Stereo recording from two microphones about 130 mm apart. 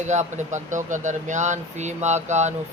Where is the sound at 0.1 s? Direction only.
65° right (ahead or behind).